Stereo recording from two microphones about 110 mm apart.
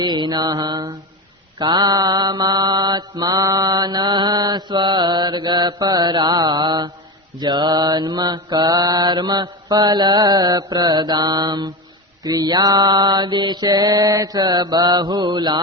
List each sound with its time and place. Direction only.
0.0 s mantra: 40° right (ahead or behind)